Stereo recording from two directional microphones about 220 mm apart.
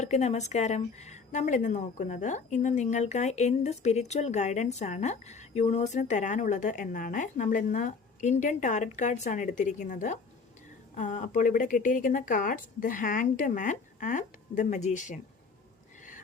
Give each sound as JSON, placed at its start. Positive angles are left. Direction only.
{"t": 0.0, "sound": "a woman's voice", "side_deg": 30}